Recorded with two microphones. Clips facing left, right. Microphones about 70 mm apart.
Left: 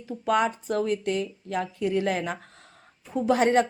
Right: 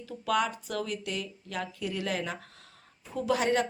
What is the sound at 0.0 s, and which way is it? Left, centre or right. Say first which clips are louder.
Speech: left 5 dB; left.